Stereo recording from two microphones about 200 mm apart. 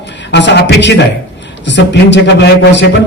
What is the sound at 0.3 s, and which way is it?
A man's voice, 60° left (ahead or behind).